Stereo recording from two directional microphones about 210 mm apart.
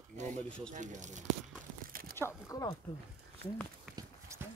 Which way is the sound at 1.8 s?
45° right (ahead or behind).